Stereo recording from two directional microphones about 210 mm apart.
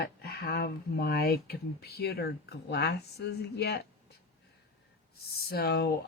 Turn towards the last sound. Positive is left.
turn(degrees=50)  # may be behind; listen again after turning